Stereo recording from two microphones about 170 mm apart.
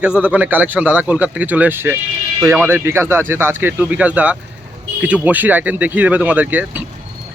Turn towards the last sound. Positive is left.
turn(degrees=-10)  # may be behind; listen again after turning